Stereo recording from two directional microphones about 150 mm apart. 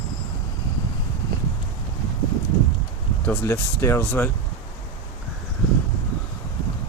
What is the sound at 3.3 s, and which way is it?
Speech, 15° left (ahead or behind).